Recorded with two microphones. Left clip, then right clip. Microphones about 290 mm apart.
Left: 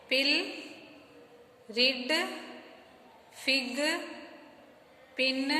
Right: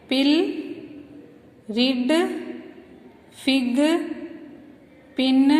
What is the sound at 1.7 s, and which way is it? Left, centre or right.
Speech, centre.